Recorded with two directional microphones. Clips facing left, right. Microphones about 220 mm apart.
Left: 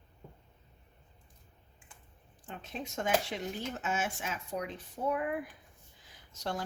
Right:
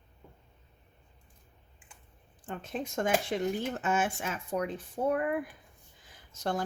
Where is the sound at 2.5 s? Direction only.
50° right (ahead or behind).